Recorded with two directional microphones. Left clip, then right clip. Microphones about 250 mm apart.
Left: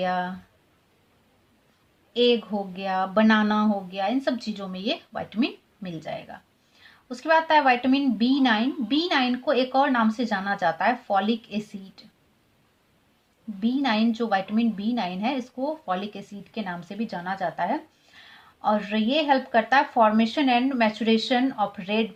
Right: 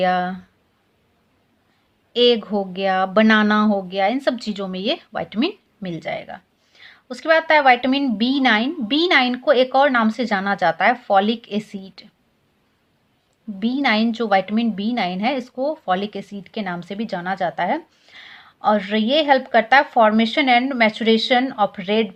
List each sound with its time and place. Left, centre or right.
0.0 s a woman's voice: right
2.1 s a woman's voice: right
13.6 s a woman's voice: right